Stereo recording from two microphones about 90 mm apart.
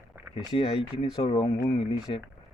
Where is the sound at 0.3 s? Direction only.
65° left (ahead or behind).